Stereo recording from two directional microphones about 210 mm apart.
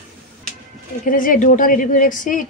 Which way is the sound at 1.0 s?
40° left (ahead or behind).